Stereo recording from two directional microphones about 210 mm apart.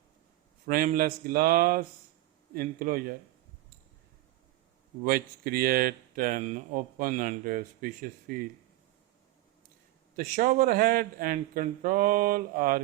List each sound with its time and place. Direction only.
0.7 s speech: 40° right (ahead or behind)
5.0 s speech: 45° right (ahead or behind)
10.2 s a man's voice: 40° right (ahead or behind)